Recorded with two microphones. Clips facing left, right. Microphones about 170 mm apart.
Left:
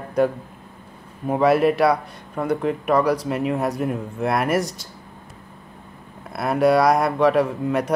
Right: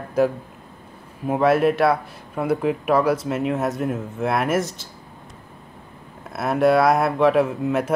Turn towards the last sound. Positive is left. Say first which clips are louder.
# even
turn(degrees=-5)  # may be behind; listen again after turning